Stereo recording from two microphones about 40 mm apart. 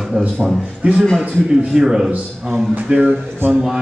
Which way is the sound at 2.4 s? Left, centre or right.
Right.